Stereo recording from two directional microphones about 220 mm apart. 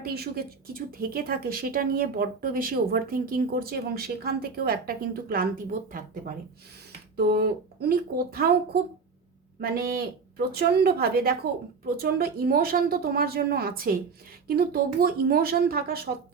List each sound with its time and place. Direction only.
0.0 s speech: 45° right (ahead or behind)